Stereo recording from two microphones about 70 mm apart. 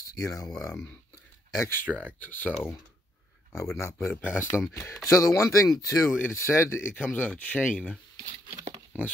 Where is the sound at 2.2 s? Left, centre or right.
Left.